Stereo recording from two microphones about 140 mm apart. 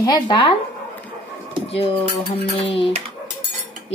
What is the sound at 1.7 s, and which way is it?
Dishes, 45° left (ahead or behind).